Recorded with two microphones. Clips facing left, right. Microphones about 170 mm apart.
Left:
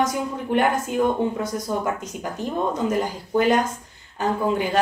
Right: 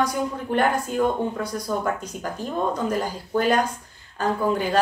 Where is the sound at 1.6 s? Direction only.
20° left (ahead or behind).